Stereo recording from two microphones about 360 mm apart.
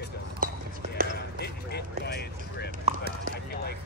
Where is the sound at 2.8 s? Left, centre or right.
Right.